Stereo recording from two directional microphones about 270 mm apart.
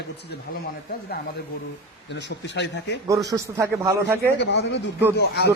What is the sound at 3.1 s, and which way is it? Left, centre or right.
Speech, centre.